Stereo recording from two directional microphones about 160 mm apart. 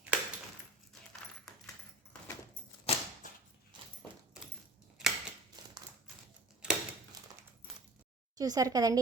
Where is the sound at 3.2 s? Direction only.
55° left (ahead or behind).